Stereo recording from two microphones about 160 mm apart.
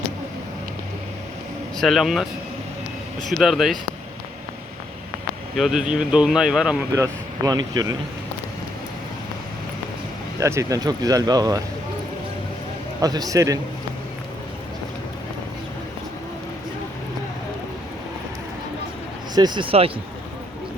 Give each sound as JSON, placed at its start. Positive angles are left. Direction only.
{"t": 1.8, "sound": "speech", "side_deg": 0}
{"t": 3.2, "sound": "speech", "side_deg": 0}
{"t": 5.5, "sound": "speech", "side_deg": -5}
{"t": 6.9, "sound": "speech", "side_deg": -20}
{"t": 10.4, "sound": "speech", "side_deg": -20}
{"t": 13.0, "sound": "speech", "side_deg": -25}
{"t": 19.3, "sound": "speech", "side_deg": -25}